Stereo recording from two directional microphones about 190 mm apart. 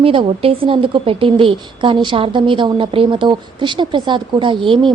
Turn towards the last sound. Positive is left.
turn(degrees=-25)  # may be behind; listen again after turning